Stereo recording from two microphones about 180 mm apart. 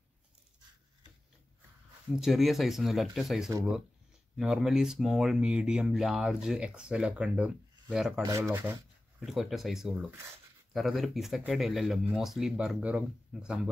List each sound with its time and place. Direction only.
2.1 s speech: centre (ahead or behind)
8.2 s speech: 15° right (ahead or behind)
9.2 s speech: centre (ahead or behind)